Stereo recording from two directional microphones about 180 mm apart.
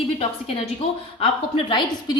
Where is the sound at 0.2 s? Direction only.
30° left (ahead or behind).